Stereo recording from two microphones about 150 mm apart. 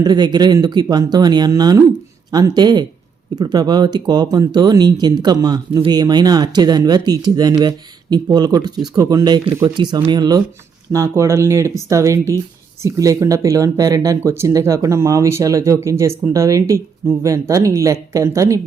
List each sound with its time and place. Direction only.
0.0 s speech: 30° right (ahead or behind)